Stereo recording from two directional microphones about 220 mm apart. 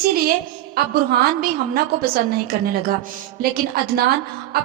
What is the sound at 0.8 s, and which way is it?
Speech, 45° right (ahead or behind).